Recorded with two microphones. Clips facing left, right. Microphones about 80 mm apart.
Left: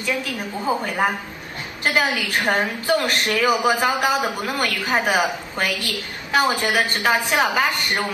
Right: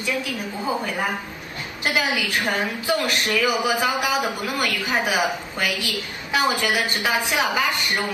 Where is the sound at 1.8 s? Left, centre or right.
Left.